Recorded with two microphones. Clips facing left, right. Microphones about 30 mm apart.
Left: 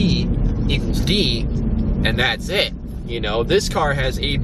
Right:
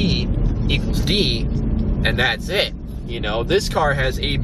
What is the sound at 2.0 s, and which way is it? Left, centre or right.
Speech, centre.